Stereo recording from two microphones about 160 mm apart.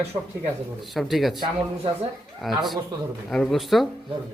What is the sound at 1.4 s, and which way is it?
Speech, 35° right (ahead or behind).